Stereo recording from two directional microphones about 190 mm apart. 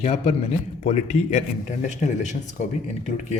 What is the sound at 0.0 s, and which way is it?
Speech, 35° left (ahead or behind).